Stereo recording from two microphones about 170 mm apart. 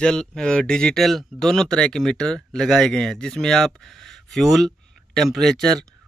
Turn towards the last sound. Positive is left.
turn(degrees=0)  # may be behind; listen again after turning